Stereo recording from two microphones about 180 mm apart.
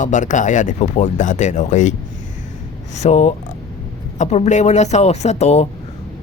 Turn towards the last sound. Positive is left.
turn(degrees=35)  # may be behind; listen again after turning